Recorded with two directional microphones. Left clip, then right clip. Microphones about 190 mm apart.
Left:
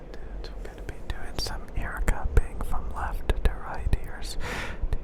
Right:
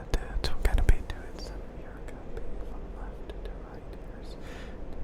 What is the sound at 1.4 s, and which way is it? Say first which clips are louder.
Whispering: left 15 dB; 30° left (ahead or behind).